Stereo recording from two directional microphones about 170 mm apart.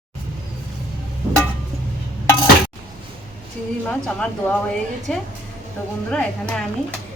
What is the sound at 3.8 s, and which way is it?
Speech, 5° left (ahead or behind).